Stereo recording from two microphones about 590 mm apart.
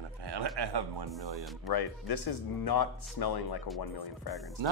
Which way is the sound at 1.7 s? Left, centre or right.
Left.